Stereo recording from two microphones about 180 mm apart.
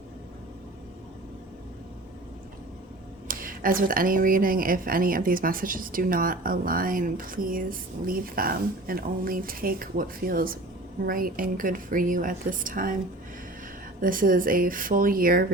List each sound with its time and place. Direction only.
3.2 s a woman's voice: 50° right (ahead or behind)
14.0 s a woman's voice: 50° right (ahead or behind)